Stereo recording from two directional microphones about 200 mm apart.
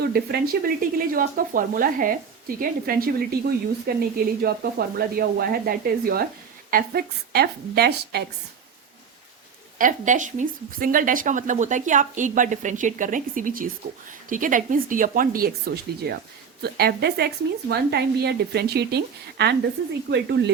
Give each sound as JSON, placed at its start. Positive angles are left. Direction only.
{"t": 0.1, "sound": "speech", "side_deg": -50}
{"t": 9.7, "sound": "speech", "side_deg": -40}